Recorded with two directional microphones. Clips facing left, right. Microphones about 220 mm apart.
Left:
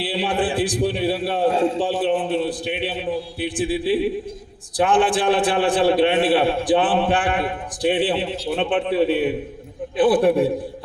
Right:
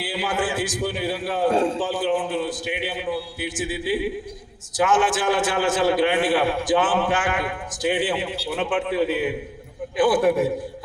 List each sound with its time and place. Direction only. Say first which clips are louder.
0.0 s a man's voice: left 3 dB; 35° left (ahead or behind)